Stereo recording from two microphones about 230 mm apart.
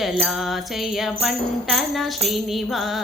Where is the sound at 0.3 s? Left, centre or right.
Centre.